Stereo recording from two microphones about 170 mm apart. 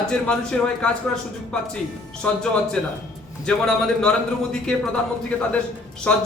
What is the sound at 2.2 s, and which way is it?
Speech, 5° left (ahead or behind).